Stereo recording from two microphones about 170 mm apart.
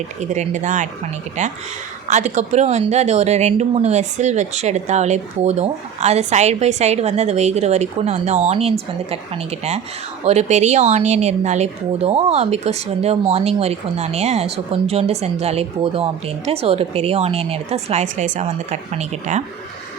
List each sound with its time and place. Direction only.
0.2 s a woman's voice: 45° right (ahead or behind)